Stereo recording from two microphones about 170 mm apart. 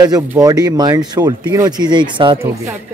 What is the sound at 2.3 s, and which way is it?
Speech, 15° right (ahead or behind).